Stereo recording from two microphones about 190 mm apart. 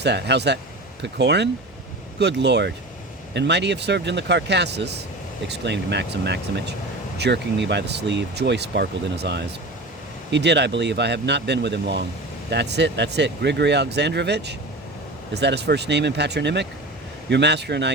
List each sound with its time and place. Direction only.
0.0 s speech: 65° right (ahead or behind)